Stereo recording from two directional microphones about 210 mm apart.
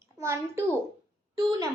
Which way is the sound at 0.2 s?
15° right (ahead or behind).